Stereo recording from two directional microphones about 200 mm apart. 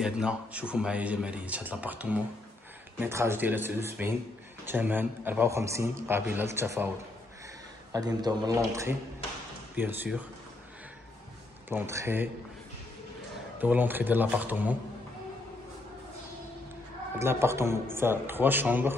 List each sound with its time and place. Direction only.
0.0 s a man's voice: 5° right (ahead or behind)
7.9 s a man's voice: 20° right (ahead or behind)
11.7 s a man's voice: 15° right (ahead or behind)
13.6 s a man's voice: 10° right (ahead or behind)
17.2 s a man's voice: 10° right (ahead or behind)